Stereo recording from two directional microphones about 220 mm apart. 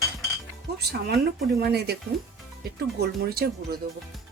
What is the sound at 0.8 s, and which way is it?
Cutlery, 45° right (ahead or behind).